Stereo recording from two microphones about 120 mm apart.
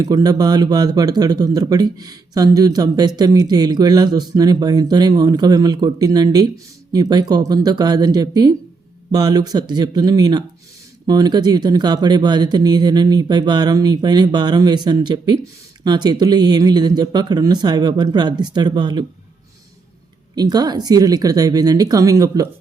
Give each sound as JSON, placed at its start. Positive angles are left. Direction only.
{"t": 0.0, "sound": "speech", "side_deg": -35}
{"t": 20.3, "sound": "speech", "side_deg": -35}